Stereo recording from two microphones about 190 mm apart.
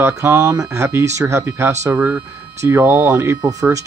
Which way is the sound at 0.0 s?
10° right (ahead or behind).